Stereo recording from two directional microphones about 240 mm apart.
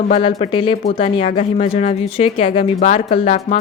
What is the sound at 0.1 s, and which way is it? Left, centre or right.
Speech, left.